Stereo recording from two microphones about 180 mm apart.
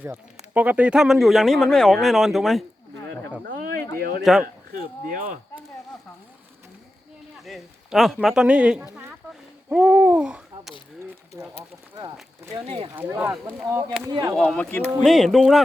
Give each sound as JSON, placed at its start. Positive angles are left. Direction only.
{"t": 0.5, "sound": "speech", "side_deg": -10}
{"t": 3.5, "sound": "a sound", "side_deg": -55}
{"t": 3.9, "sound": "speech", "side_deg": -55}
{"t": 4.2, "sound": "speech", "side_deg": 0}
{"t": 4.7, "sound": "speech", "side_deg": -50}
{"t": 7.4, "sound": "a man's voice", "side_deg": 0}
{"t": 11.3, "sound": "speech", "side_deg": -15}
{"t": 12.5, "sound": "speech", "side_deg": -30}
{"t": 13.0, "sound": "speech", "side_deg": -10}
{"t": 14.1, "sound": "speech", "side_deg": -20}
{"t": 14.3, "sound": "speech", "side_deg": 5}